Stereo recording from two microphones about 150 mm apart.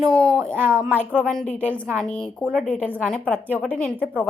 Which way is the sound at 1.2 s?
5° left (ahead or behind).